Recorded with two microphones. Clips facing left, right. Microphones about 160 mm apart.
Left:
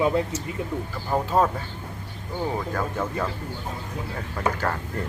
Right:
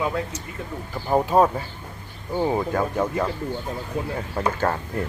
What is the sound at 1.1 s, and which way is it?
Speech, 15° right (ahead or behind).